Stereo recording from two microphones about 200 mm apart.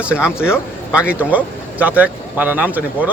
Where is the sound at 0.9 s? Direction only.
5° right (ahead or behind).